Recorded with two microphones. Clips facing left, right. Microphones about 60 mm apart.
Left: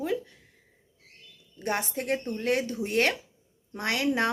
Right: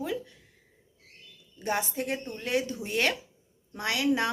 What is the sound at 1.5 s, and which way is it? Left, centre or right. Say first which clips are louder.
Speech: even; left.